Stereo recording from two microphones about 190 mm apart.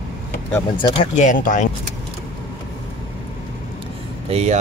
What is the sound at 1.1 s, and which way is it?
Speech, 40° left (ahead or behind).